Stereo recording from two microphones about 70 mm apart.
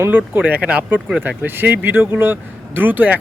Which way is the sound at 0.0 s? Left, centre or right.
Right.